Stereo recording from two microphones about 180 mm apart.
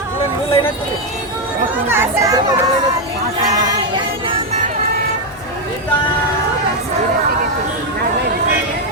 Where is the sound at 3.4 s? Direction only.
20° right (ahead or behind).